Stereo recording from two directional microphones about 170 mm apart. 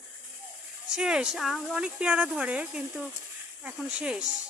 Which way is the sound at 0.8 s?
5° right (ahead or behind).